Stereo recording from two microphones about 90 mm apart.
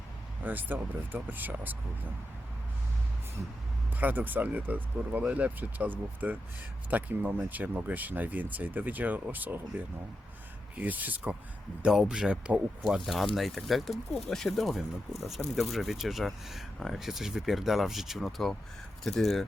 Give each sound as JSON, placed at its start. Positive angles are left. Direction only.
{"t": 0.4, "sound": "speech", "side_deg": -20}
{"t": 3.9, "sound": "speech", "side_deg": -20}
{"t": 12.8, "sound": "speech", "side_deg": -5}